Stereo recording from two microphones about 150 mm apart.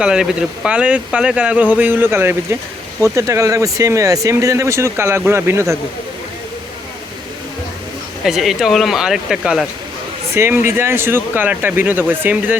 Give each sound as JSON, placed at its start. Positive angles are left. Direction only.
{"t": 0.0, "sound": "speech", "side_deg": -5}
{"t": 8.2, "sound": "speech", "side_deg": 0}
{"t": 10.3, "sound": "speech", "side_deg": -15}